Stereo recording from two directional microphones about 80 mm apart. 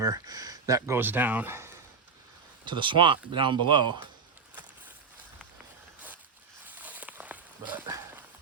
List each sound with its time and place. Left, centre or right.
0.0 s speech: right
0.9 s speech: right
2.6 s speech: right
6.7 s a sound: centre